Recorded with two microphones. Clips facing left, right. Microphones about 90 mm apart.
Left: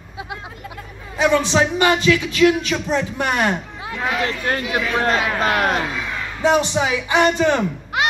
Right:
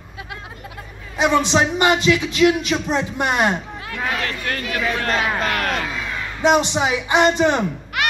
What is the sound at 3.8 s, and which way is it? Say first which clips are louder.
Speech: left 2 dB; 20° left (ahead or behind).